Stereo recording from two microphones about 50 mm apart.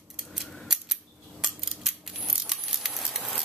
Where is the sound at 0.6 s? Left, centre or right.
Centre.